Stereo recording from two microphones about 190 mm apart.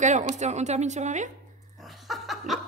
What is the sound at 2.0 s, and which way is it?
Laughter, centre (ahead or behind).